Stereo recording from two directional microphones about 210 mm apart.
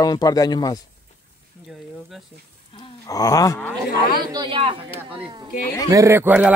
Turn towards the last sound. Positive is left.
turn(degrees=-10)  # may be behind; listen again after turning